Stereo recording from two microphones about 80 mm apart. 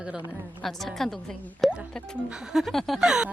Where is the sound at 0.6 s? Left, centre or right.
Centre.